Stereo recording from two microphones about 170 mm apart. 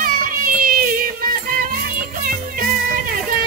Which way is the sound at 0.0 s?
55° right (ahead or behind).